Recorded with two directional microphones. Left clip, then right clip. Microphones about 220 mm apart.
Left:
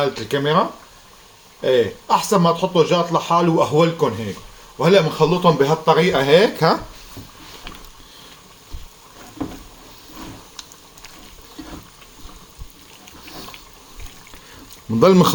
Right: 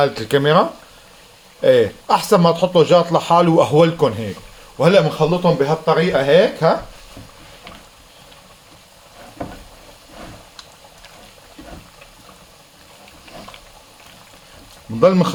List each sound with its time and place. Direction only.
0.0 s speech: 30° right (ahead or behind)
1.6 s a man's voice: 30° right (ahead or behind)
5.3 s speech: 15° left (ahead or behind)
14.9 s speech: 30° left (ahead or behind)